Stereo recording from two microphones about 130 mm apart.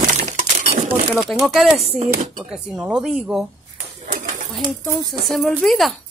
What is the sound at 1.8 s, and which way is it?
Speech, 50° right (ahead or behind).